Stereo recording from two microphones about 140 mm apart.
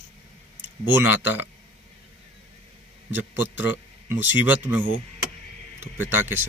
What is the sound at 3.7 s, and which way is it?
A man's voice, 15° right (ahead or behind).